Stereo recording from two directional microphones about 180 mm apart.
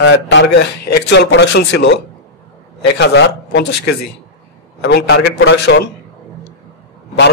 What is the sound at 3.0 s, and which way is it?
Speech, 70° left (ahead or behind).